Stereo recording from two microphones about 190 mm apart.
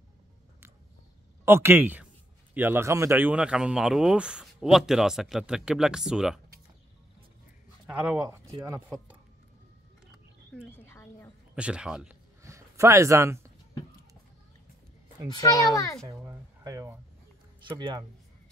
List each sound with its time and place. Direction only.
1.4 s speech: 10° right (ahead or behind)
7.8 s speech: 10° right (ahead or behind)
10.5 s frog: 10° left (ahead or behind)
11.5 s speech: 5° right (ahead or behind)
12.4 s speech: 15° right (ahead or behind)
15.3 s a child's voice: 15° left (ahead or behind)
16.0 s speech: 15° right (ahead or behind)